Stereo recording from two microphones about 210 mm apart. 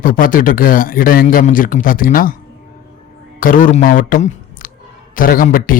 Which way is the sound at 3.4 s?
40° left (ahead or behind).